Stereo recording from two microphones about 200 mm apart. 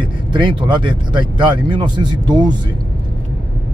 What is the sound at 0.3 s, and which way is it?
Speech, 25° right (ahead or behind).